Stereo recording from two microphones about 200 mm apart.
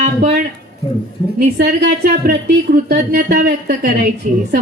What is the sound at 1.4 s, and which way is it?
Speech, 50° right (ahead or behind).